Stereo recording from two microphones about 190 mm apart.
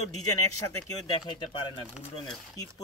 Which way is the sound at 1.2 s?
25° left (ahead or behind).